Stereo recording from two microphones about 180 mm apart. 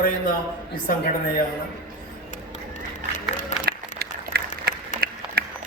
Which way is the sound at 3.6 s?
65° right (ahead or behind).